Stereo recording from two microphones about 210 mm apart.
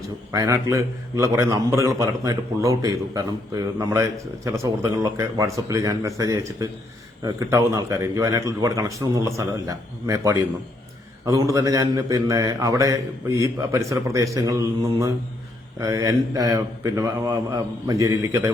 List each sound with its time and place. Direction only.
0.3 s a man's voice: 15° right (ahead or behind)